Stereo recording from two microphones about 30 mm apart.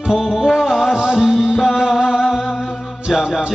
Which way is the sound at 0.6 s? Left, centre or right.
Centre.